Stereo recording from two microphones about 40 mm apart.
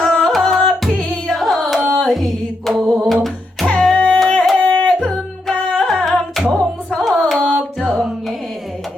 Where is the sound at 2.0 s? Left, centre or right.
Centre.